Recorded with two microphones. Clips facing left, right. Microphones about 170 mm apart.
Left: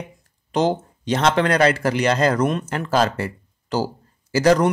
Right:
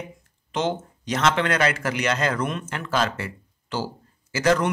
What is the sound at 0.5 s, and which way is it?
A man's voice, 35° left (ahead or behind).